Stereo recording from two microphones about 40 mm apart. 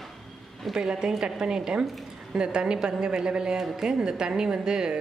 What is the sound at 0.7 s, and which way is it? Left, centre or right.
A woman's voice, centre.